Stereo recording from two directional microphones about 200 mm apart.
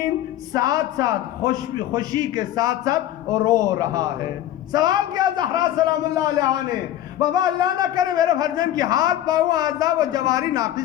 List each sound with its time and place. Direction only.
0.5 s a man's voice: 20° right (ahead or behind)